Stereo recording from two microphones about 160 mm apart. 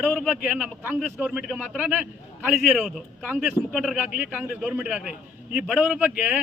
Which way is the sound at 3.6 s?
20° left (ahead or behind).